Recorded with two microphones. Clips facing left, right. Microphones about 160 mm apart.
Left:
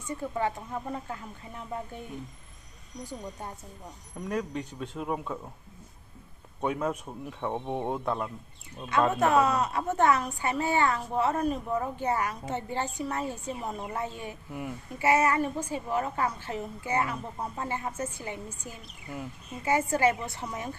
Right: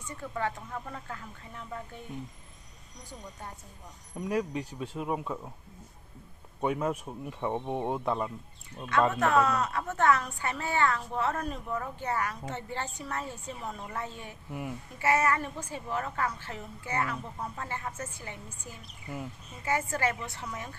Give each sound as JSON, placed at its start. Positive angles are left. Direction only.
{"t": 0.2, "sound": "speech", "side_deg": 20}
{"t": 4.2, "sound": "speech", "side_deg": -5}
{"t": 6.6, "sound": "speech", "side_deg": -5}
{"t": 9.1, "sound": "speech", "side_deg": 15}
{"t": 14.5, "sound": "speech", "side_deg": 0}
{"t": 15.0, "sound": "speech", "side_deg": 15}
{"t": 19.6, "sound": "speech", "side_deg": 15}